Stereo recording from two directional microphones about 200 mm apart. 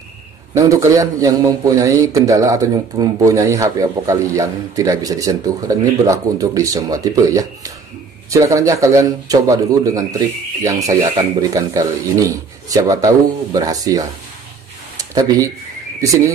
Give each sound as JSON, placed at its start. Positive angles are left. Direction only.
{"t": 0.6, "sound": "a man's voice", "side_deg": -15}